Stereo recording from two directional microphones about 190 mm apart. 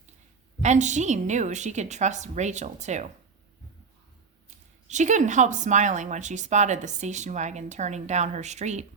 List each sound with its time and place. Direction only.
0.6 s speech: 40° right (ahead or behind)
4.9 s speech: 40° right (ahead or behind)